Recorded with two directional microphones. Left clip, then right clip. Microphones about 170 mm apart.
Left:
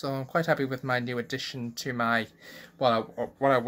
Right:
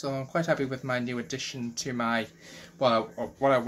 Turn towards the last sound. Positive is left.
turn(degrees=50)  # may be behind; listen again after turning